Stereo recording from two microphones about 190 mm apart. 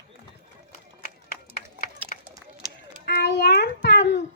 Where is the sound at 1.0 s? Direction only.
55° left (ahead or behind).